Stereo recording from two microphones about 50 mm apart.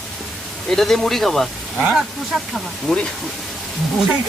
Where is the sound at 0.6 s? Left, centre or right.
Centre.